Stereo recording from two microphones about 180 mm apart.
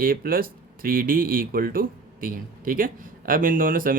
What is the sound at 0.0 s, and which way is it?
Speech, 55° right (ahead or behind).